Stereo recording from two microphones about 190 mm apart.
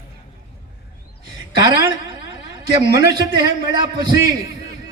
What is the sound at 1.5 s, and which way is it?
Speech, 20° right (ahead or behind).